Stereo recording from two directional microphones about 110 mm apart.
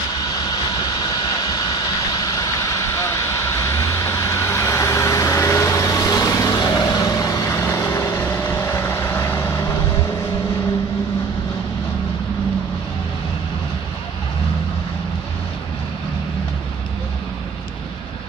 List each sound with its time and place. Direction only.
0.2 s vehicle: 40° left (ahead or behind)